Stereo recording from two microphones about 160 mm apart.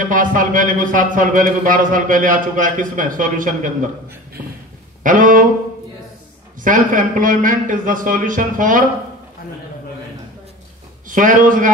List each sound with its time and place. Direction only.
0.0 s a man's voice: 55° right (ahead or behind)
5.0 s a man's voice: 55° right (ahead or behind)
6.6 s a man's voice: 55° right (ahead or behind)
11.1 s a man's voice: 55° right (ahead or behind)